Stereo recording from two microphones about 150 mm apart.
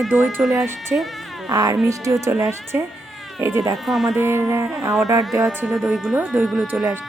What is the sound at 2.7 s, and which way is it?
Speech, 10° right (ahead or behind).